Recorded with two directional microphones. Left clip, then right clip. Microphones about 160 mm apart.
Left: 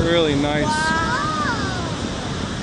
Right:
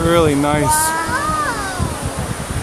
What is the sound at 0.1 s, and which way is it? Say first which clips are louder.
Speech: right 6 dB; 20° right (ahead or behind).